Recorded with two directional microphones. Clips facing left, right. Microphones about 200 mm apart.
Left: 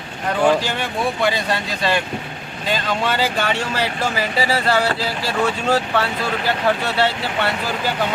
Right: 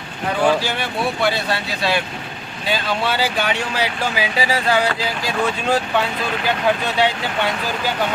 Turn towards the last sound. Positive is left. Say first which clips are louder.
# even
turn(degrees=-15)  # may be behind; listen again after turning